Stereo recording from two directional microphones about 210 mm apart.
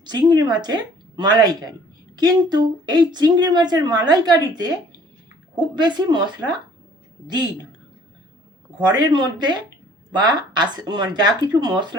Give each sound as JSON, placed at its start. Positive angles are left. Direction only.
{"t": 0.0, "sound": "speech", "side_deg": -20}
{"t": 8.8, "sound": "speech", "side_deg": -20}